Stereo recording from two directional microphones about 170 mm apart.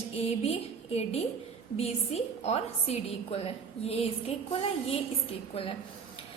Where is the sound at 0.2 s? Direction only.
35° left (ahead or behind).